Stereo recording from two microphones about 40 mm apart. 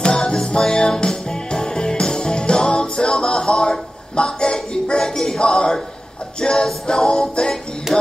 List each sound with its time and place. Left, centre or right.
0.0 s music: centre
7.9 s music: centre